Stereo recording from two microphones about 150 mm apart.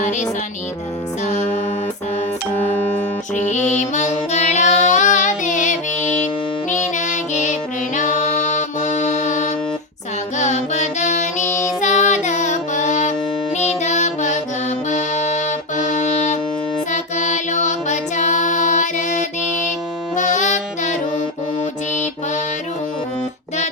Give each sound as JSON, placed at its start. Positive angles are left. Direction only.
{"t": 1.2, "sound": "music", "side_deg": 50}
{"t": 2.6, "sound": "music", "side_deg": 15}
{"t": 3.3, "sound": "music", "side_deg": 50}